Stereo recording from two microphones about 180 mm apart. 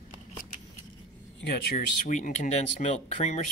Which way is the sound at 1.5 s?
50° left (ahead or behind).